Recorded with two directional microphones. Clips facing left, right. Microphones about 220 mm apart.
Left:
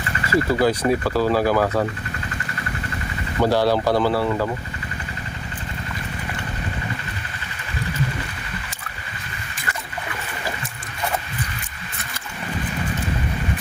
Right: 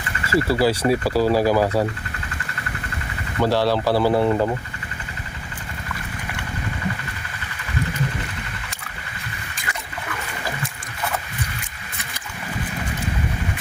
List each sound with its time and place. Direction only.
0.3 s speech: 30° right (ahead or behind)
0.6 s speech: 10° right (ahead or behind)
3.4 s speech: centre (ahead or behind)
4.1 s speech: 20° right (ahead or behind)